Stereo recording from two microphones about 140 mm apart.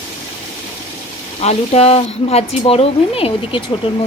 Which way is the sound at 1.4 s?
50° left (ahead or behind).